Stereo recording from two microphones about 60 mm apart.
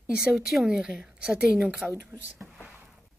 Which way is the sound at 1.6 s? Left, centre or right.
Right.